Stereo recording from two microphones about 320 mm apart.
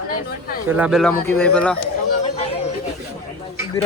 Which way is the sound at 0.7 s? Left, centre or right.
Centre.